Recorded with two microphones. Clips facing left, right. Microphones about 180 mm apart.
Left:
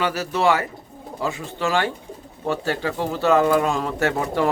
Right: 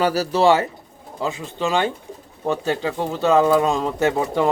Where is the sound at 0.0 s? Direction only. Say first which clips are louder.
Right 4 dB; 35° right (ahead or behind).